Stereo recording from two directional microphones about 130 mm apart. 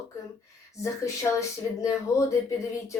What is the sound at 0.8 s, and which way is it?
Speech, 25° left (ahead or behind).